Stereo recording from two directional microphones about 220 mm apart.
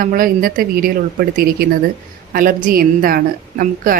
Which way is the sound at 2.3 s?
40° right (ahead or behind).